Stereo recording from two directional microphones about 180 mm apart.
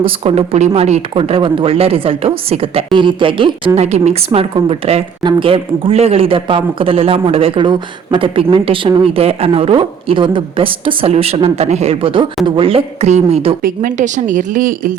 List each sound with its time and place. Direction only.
0.0 s speech: 35° right (ahead or behind)
13.6 s speech: 50° right (ahead or behind)